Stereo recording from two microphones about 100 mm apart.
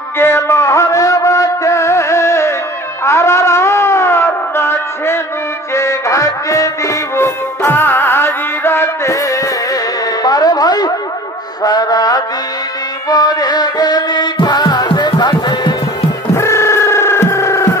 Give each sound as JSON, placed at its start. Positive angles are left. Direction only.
{"t": 0.2, "sound": "music", "side_deg": 25}
{"t": 3.1, "sound": "shofar", "side_deg": 30}
{"t": 5.8, "sound": "music", "side_deg": 30}
{"t": 10.2, "sound": "a sound", "side_deg": 40}
{"t": 11.6, "sound": "music", "side_deg": 40}
{"t": 16.3, "sound": "music", "side_deg": 30}